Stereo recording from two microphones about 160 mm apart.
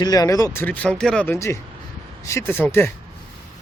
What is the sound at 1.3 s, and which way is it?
Speech, 20° left (ahead or behind).